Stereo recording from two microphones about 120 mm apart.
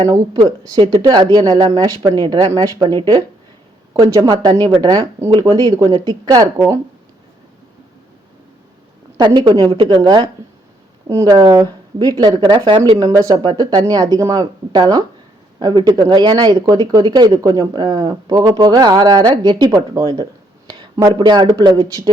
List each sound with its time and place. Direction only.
1.0 s speech: 35° right (ahead or behind)
9.1 s speech: 40° right (ahead or behind)
9.7 s speech: 50° right (ahead or behind)
10.0 s speech: 35° right (ahead or behind)
13.0 s speech: 30° right (ahead or behind)